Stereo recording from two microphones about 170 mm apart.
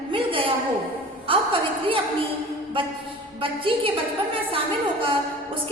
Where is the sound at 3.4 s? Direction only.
30° right (ahead or behind).